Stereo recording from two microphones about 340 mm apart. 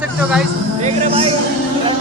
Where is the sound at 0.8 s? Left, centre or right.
Centre.